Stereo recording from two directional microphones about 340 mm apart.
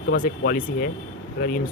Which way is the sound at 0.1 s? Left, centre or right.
Left.